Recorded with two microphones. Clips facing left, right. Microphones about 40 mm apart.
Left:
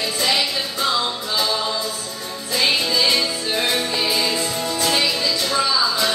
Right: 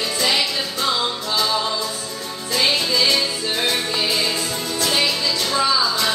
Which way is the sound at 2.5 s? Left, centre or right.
Centre.